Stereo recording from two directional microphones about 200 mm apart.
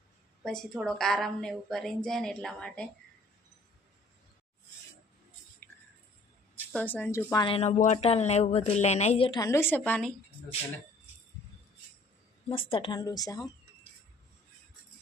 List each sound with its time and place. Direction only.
0.4 s a woman's voice: centre (ahead or behind)
6.7 s speech: 10° left (ahead or behind)
7.4 s a woman's voice: 30° left (ahead or behind); by 10.1 s 10° left (ahead or behind)
12.5 s a woman's voice: 25° left (ahead or behind)